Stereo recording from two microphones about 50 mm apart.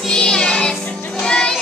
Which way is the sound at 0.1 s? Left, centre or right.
Centre.